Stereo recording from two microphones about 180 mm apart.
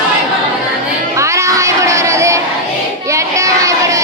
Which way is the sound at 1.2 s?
15° right (ahead or behind).